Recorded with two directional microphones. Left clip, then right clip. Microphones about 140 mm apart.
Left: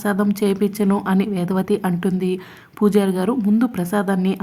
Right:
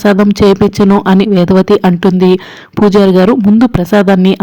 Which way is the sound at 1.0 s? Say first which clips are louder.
Right 13 dB; 45° right (ahead or behind).